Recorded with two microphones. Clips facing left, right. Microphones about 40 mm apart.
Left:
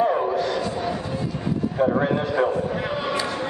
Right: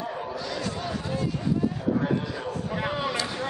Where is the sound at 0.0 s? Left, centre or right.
Left.